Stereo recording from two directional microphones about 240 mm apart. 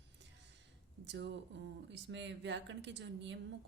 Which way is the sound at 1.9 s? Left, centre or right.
Right.